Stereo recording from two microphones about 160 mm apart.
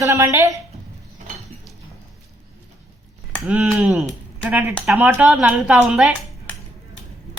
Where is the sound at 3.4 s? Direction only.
10° right (ahead or behind).